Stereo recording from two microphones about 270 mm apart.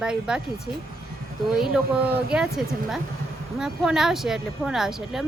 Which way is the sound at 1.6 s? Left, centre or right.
Centre.